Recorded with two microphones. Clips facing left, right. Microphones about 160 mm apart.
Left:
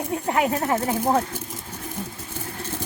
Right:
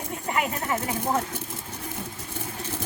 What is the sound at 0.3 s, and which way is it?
Speech, 45° left (ahead or behind).